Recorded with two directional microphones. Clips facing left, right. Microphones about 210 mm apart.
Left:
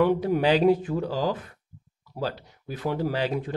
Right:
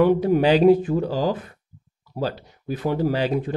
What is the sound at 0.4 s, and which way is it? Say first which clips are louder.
Speech: right 5 dB; 10° right (ahead or behind).